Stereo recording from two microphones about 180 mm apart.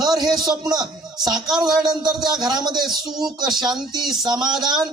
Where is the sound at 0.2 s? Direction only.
20° right (ahead or behind).